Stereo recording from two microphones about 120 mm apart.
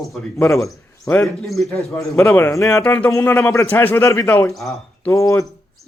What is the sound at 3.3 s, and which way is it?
Speech, 10° left (ahead or behind).